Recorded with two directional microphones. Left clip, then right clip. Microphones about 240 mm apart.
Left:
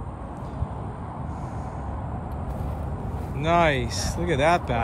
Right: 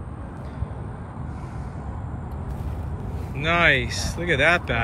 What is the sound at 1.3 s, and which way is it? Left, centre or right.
Vehicle, left.